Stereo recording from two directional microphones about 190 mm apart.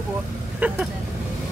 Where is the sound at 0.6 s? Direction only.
10° right (ahead or behind).